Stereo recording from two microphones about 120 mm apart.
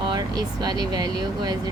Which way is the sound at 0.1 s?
35° right (ahead or behind).